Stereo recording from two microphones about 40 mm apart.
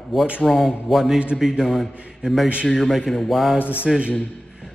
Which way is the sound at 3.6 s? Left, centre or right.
Left.